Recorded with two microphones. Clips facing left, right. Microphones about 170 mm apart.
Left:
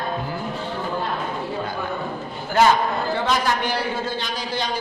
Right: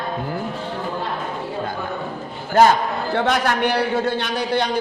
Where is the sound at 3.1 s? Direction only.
60° right (ahead or behind).